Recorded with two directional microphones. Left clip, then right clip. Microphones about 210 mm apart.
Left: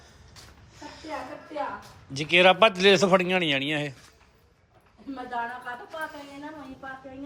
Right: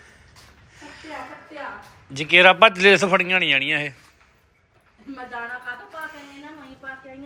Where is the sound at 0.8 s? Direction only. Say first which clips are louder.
Right 1 dB; 15° left (ahead or behind).